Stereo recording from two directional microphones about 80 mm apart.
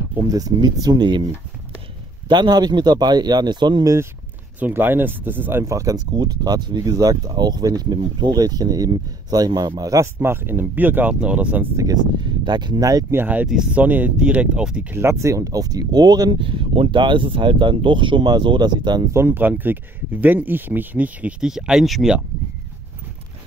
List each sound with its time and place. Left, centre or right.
0.3 s speech: right
2.2 s speech: right
3.8 s speech: right
4.6 s speech: right
5.7 s speech: right
10.1 s speech: right
11.7 s speech: right
12.2 s speech: right
13.1 s speech: right
14.9 s speech: right
19.1 s speech: right; by 22.1 s centre